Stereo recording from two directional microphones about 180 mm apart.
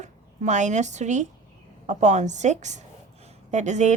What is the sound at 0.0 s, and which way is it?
A woman's voice, 40° right (ahead or behind).